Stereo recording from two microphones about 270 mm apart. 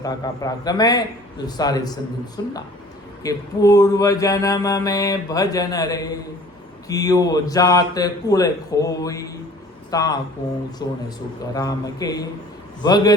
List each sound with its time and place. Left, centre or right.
0.0 s mantra: centre